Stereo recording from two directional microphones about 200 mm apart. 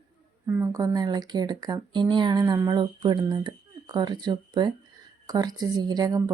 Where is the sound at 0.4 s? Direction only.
15° right (ahead or behind).